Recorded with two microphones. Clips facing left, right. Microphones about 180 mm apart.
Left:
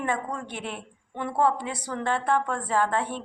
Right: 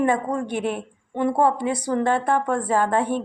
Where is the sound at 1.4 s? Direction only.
15° right (ahead or behind).